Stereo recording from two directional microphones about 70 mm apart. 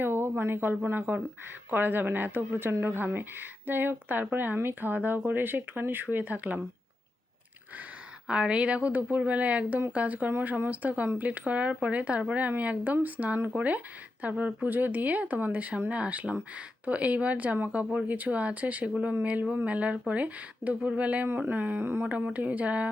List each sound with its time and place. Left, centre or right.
0.0 s speech: right
8.3 s speech: centre
21.2 s speech: right
22.0 s speech: right